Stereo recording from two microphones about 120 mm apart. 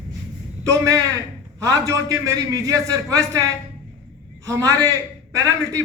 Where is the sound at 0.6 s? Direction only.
30° right (ahead or behind).